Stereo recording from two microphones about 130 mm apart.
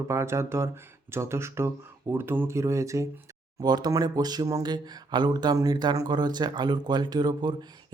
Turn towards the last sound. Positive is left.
turn(degrees=-35)  # may be behind; listen again after turning